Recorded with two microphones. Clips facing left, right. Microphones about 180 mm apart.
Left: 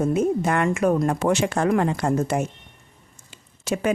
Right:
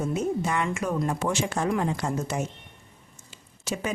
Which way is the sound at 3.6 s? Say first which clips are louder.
Left 7 dB; 60° left (ahead or behind).